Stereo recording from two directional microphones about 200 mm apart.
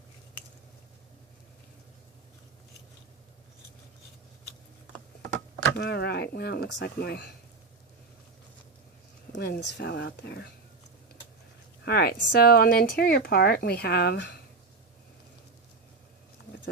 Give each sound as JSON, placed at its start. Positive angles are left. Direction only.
{"t": 5.7, "sound": "speech", "side_deg": 55}
{"t": 9.3, "sound": "speech", "side_deg": 55}
{"t": 11.9, "sound": "speech", "side_deg": 55}